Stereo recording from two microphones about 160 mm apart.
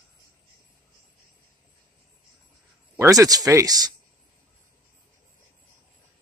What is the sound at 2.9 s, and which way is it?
Speech, 20° right (ahead or behind).